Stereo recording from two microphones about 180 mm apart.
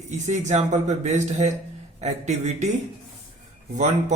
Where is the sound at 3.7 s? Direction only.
40° right (ahead or behind).